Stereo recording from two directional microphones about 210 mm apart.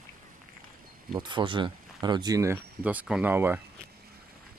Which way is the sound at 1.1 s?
20° right (ahead or behind).